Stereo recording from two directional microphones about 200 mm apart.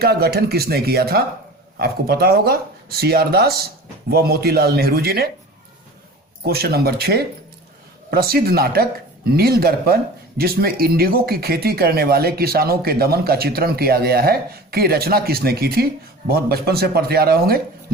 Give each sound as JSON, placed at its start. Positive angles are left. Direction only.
{"t": 0.0, "sound": "speech", "side_deg": -50}
{"t": 6.4, "sound": "speech", "side_deg": -50}